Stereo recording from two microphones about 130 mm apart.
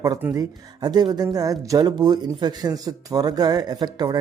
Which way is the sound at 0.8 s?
35° right (ahead or behind).